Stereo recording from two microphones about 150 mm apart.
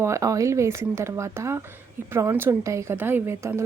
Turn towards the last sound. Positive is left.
turn(degrees=-15)  # may be behind; listen again after turning